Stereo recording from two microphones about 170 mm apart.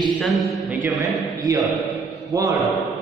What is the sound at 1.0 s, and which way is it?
Speech, 20° right (ahead or behind).